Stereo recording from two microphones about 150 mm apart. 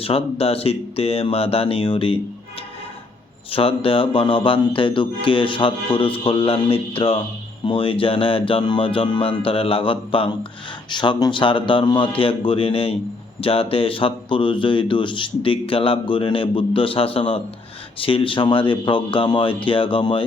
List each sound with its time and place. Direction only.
0.0 s speech: 40° left (ahead or behind)
3.5 s speech: 40° left (ahead or behind)